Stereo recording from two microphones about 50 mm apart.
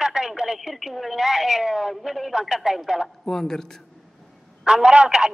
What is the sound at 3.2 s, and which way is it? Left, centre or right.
Speech, centre.